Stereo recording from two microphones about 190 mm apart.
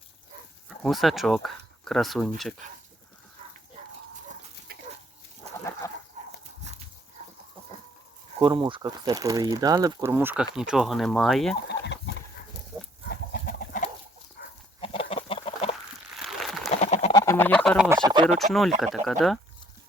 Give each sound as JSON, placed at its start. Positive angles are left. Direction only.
{"t": 0.8, "sound": "speech", "side_deg": 0}
{"t": 4.7, "sound": "dog", "side_deg": -55}
{"t": 5.8, "sound": "a sound", "side_deg": 15}
{"t": 8.4, "sound": "speech", "side_deg": -25}
{"t": 11.7, "sound": "chicken", "side_deg": 65}
{"t": 13.1, "sound": "chicken", "side_deg": 50}
{"t": 14.4, "sound": "goat", "side_deg": 55}
{"t": 14.8, "sound": "chicken", "side_deg": 30}
{"t": 16.2, "sound": "a sound", "side_deg": 0}
{"t": 16.8, "sound": "chicken", "side_deg": 35}
{"t": 17.1, "sound": "a sound", "side_deg": 15}
{"t": 17.8, "sound": "speech", "side_deg": -15}
{"t": 18.1, "sound": "speech", "side_deg": -25}
{"t": 18.3, "sound": "speech", "side_deg": 0}